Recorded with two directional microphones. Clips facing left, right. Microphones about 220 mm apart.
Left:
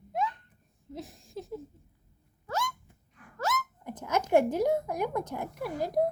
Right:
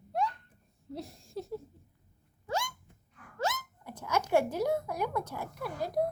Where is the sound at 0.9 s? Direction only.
Centre (ahead or behind).